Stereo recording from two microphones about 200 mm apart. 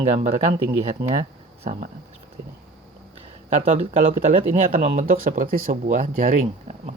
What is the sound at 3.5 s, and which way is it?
Speech, 30° right (ahead or behind).